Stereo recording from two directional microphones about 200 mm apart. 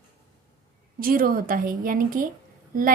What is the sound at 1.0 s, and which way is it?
A woman's voice, 45° right (ahead or behind).